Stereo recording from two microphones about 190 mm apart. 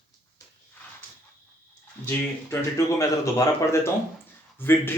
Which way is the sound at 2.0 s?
10° left (ahead or behind).